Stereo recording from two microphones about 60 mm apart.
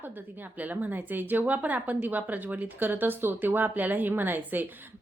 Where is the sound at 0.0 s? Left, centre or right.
Right.